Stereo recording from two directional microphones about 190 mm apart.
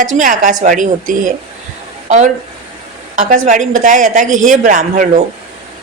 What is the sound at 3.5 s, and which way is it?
Speech, 40° right (ahead or behind).